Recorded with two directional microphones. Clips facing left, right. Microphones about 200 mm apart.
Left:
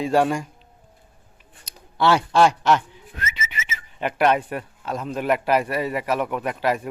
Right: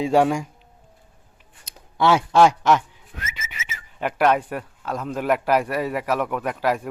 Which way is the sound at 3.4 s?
75° left (ahead or behind).